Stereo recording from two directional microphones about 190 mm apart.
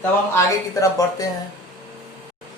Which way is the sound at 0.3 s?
15° left (ahead or behind).